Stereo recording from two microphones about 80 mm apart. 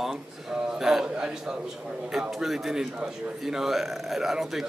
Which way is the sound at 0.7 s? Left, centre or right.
Centre.